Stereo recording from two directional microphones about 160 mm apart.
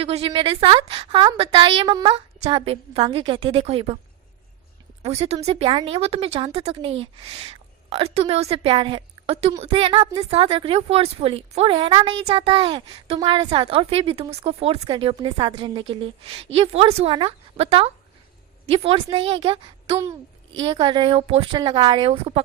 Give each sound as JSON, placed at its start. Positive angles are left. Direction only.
{"t": 0.0, "sound": "a child's voice", "side_deg": -35}
{"t": 5.0, "sound": "a child's voice", "side_deg": -40}